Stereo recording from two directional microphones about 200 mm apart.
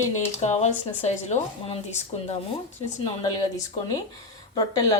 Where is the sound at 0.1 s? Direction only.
35° left (ahead or behind).